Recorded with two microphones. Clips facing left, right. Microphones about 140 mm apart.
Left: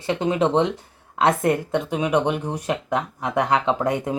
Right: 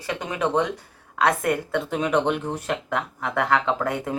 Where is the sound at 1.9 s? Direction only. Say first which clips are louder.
Left 1 dB; 10° left (ahead or behind).